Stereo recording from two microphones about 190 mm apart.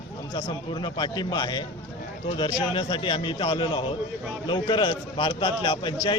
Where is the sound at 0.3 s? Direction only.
25° left (ahead or behind).